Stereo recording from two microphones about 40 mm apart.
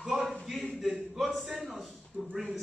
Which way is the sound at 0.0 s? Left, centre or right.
Centre.